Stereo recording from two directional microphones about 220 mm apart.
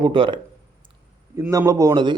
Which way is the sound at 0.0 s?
20° right (ahead or behind).